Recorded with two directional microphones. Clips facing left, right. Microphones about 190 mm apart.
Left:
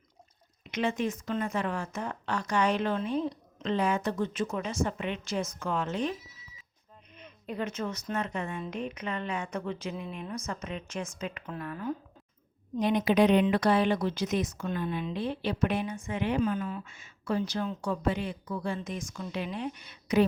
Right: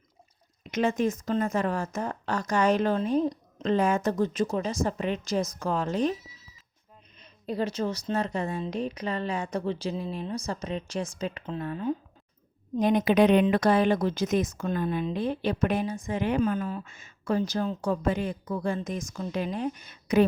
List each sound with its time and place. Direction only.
0.6 s speech: 45° right (ahead or behind)
7.3 s speech: 35° right (ahead or behind)
12.7 s a woman's voice: 45° right (ahead or behind)